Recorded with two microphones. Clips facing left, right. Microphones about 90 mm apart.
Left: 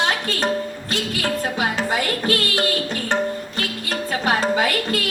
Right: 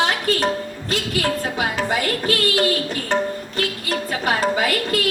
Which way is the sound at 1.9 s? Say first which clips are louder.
Even; 25° left (ahead or behind).